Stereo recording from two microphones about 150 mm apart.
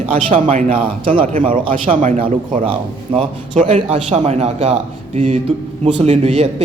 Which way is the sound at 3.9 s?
40° right (ahead or behind).